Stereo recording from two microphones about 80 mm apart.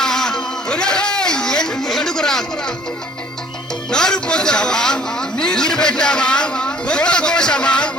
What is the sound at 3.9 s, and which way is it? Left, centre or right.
A man's voice, centre.